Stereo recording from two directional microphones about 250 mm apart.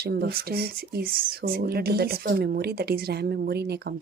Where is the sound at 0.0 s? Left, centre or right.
Right.